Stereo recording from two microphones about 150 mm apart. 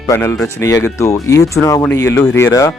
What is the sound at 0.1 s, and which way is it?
Speech, 15° left (ahead or behind).